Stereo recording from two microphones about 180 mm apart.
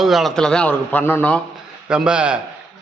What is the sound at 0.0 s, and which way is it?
A man's voice, centre (ahead or behind).